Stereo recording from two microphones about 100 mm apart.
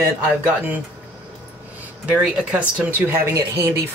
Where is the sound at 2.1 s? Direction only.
10° right (ahead or behind).